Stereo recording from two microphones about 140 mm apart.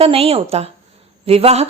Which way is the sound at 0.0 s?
45° right (ahead or behind).